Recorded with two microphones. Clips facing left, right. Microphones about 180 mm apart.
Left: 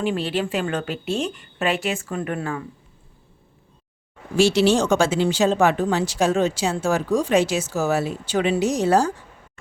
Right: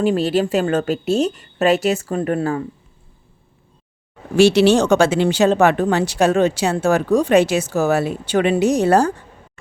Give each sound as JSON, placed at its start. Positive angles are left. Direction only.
{"t": 0.0, "sound": "a woman's voice", "side_deg": -40}
{"t": 4.4, "sound": "speech", "side_deg": -65}